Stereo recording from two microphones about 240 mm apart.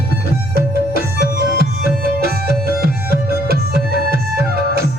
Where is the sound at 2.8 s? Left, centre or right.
Right.